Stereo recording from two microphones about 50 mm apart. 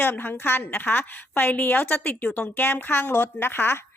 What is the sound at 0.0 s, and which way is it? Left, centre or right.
A woman's voice, left.